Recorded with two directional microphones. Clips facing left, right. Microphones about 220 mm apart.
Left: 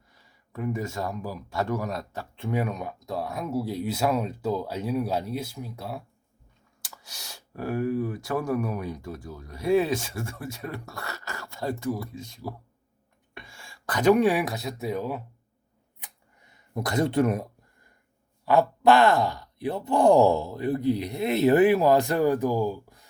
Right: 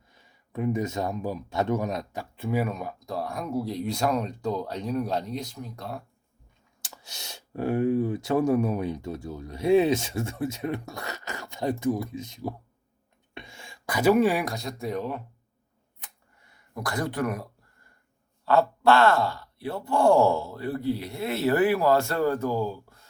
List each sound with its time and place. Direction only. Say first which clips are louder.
0.1 s speech: right 5 dB; 20° right (ahead or behind)
2.3 s speech: right 1 dB; 5° right (ahead or behind)
6.8 s speech: right 2 dB; 25° right (ahead or behind); by 15.2 s 5° left (ahead or behind)
16.5 s speech: left 3 dB; 20° left (ahead or behind)